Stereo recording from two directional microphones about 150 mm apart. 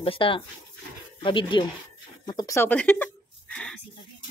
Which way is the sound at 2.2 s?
25° left (ahead or behind).